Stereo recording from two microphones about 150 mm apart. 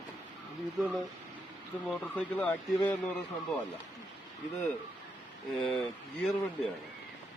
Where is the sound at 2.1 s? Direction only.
10° left (ahead or behind).